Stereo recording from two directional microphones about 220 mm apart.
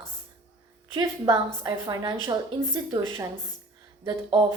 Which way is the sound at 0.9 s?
15° right (ahead or behind).